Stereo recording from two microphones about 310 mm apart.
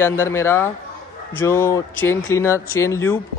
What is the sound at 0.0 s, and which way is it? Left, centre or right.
Speech, centre.